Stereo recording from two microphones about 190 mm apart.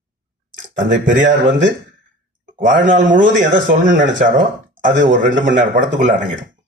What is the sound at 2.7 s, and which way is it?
Speech, 40° right (ahead or behind).